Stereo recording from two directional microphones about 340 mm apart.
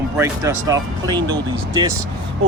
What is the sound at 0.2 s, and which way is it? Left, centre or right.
Speech, centre.